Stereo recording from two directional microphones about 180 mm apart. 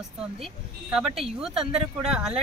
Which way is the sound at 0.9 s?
5° right (ahead or behind).